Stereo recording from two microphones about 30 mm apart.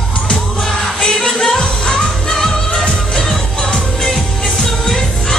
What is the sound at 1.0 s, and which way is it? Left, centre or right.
Music, centre.